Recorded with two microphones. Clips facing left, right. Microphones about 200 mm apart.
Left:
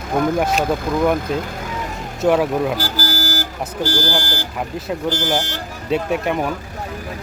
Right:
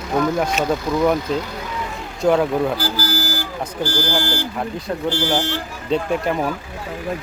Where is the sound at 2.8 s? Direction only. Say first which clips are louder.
Right 1 dB; 40° left (ahead or behind).